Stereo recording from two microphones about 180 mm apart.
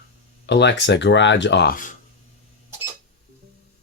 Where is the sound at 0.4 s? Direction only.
70° left (ahead or behind).